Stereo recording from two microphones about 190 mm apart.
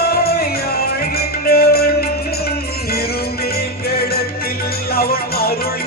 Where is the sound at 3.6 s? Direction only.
55° left (ahead or behind).